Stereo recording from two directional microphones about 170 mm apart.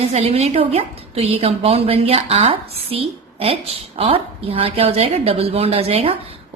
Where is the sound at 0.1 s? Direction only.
40° right (ahead or behind).